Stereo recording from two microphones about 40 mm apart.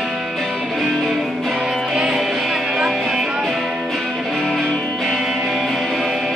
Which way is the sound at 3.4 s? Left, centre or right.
Centre.